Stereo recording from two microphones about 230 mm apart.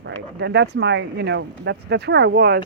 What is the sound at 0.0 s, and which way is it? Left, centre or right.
Speech, right.